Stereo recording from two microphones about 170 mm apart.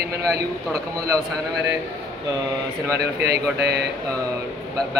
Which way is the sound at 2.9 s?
75° right (ahead or behind).